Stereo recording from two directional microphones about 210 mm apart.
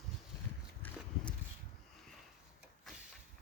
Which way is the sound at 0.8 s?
10° left (ahead or behind).